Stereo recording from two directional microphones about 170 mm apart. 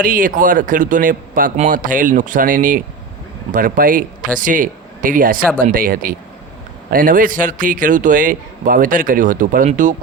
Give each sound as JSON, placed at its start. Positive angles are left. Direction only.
{"t": 0.0, "sound": "a man's voice", "side_deg": -55}